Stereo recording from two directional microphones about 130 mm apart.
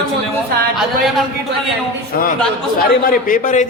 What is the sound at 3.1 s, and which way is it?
Speech, 90° left.